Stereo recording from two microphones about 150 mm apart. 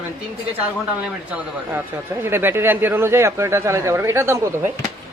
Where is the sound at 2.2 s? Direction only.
15° right (ahead or behind).